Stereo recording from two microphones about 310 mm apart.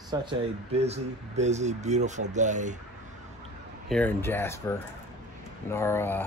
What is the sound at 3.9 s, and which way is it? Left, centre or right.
Speech, centre.